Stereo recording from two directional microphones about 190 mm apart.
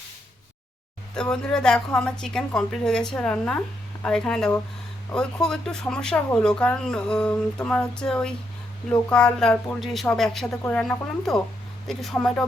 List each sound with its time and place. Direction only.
1.1 s speech: 5° left (ahead or behind)